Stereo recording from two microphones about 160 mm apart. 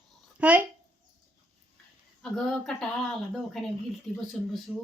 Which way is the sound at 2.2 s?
5° left (ahead or behind).